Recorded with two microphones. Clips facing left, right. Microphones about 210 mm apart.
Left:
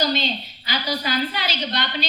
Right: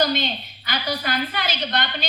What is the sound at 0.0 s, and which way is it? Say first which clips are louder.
A woman's voice: right 1 dB; 55° right (ahead or behind).